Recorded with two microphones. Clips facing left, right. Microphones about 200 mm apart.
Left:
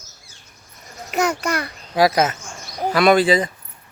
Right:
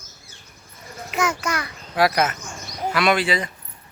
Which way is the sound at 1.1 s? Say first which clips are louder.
Left 3 dB; 35° left (ahead or behind).